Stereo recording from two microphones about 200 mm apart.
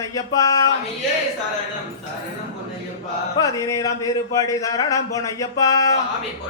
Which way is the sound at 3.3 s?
15° left (ahead or behind).